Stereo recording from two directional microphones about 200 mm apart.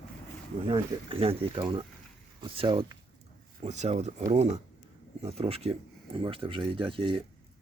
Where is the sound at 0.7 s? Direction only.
25° right (ahead or behind).